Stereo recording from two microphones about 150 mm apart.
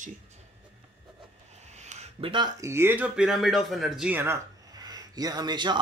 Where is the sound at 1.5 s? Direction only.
50° right (ahead or behind).